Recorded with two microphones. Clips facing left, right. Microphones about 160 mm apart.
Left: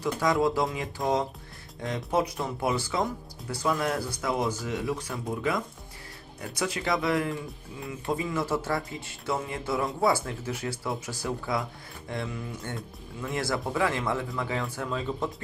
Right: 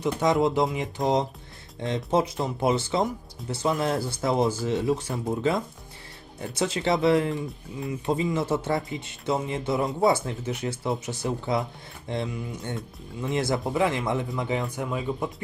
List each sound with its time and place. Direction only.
0.0 s speech: 20° right (ahead or behind)